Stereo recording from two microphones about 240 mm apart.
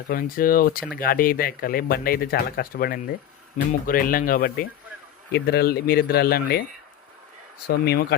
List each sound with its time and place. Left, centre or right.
0.1 s speech: left
7.7 s speech: left